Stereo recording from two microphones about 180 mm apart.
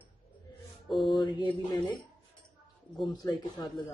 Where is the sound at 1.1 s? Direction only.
25° left (ahead or behind).